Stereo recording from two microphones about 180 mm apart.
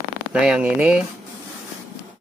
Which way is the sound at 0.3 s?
5° right (ahead or behind).